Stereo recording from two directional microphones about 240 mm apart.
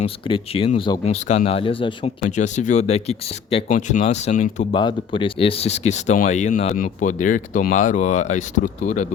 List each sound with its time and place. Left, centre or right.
0.0 s speech: left
4.7 s speech: centre